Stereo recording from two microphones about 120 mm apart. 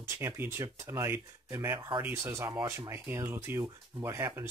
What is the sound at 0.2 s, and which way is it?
Speech, 20° right (ahead or behind).